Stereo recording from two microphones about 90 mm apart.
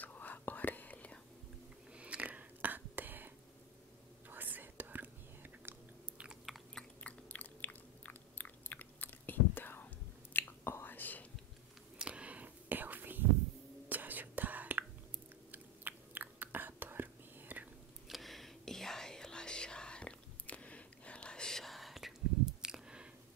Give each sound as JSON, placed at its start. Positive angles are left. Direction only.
{"t": 0.0, "sound": "whispering", "side_deg": 20}
{"t": 2.0, "sound": "whispering", "side_deg": -15}
{"t": 4.3, "sound": "chewing", "side_deg": -20}
{"t": 6.2, "sound": "chewing", "side_deg": 0}
{"t": 10.3, "sound": "whispering", "side_deg": 25}
{"t": 12.0, "sound": "whispering", "side_deg": -15}
{"t": 18.0, "sound": "whispering", "side_deg": 0}
{"t": 22.6, "sound": "a sound", "side_deg": -10}